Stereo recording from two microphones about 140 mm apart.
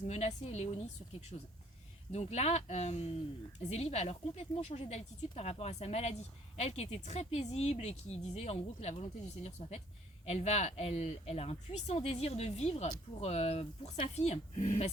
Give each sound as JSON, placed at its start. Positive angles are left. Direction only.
{"t": 0.1, "sound": "speech", "side_deg": 55}